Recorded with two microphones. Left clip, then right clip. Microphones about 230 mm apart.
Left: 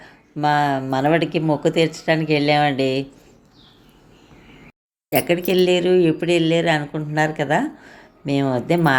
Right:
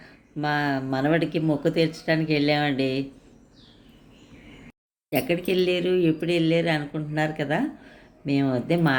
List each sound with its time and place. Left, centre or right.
0.0 s speech: centre
5.1 s speech: centre